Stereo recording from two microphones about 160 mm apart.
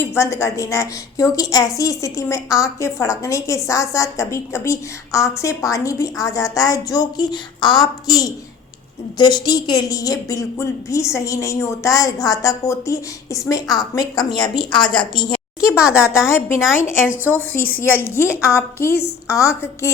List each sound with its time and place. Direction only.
0.0 s a woman's voice: 15° left (ahead or behind)
15.7 s a woman's voice: 15° left (ahead or behind)